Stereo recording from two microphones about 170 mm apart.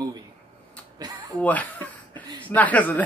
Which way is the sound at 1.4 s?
10° left (ahead or behind).